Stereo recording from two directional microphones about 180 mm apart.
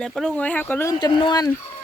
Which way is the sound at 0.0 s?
Centre (ahead or behind).